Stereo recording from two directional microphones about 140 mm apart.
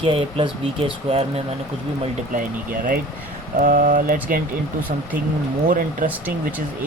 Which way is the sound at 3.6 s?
70° right (ahead or behind).